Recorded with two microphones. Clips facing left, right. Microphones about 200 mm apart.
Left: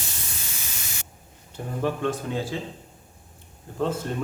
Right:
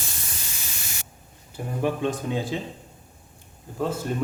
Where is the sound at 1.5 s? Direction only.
15° right (ahead or behind).